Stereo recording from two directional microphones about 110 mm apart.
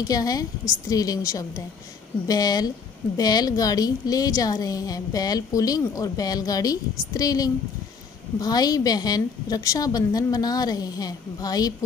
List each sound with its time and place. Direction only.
0.0 s a woman's voice: 35° left (ahead or behind)